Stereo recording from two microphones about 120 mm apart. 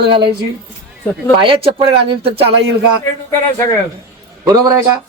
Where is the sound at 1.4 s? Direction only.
45° right (ahead or behind).